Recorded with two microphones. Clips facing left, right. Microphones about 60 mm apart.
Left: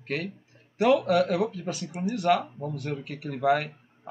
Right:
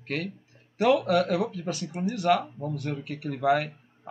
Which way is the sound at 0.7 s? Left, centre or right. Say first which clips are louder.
Left 1 dB; centre.